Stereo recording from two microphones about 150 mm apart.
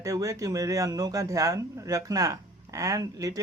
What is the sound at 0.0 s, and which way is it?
Speech, 20° right (ahead or behind).